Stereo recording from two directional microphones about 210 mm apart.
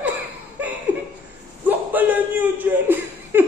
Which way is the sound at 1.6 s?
10° right (ahead or behind).